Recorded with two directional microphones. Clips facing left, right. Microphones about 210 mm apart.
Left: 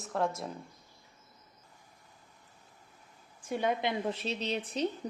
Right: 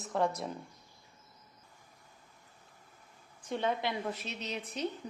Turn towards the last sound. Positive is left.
turn(degrees=30)  # may be behind; listen again after turning